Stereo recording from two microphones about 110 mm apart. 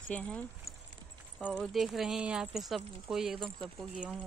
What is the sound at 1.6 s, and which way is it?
Speech, centre (ahead or behind).